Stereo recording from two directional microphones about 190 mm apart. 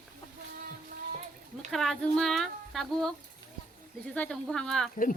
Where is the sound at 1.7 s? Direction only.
Centre (ahead or behind).